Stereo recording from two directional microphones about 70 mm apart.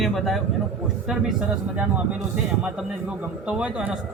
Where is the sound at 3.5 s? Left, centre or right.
Centre.